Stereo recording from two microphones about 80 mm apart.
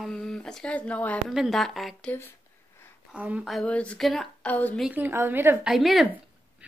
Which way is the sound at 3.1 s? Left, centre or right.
Centre.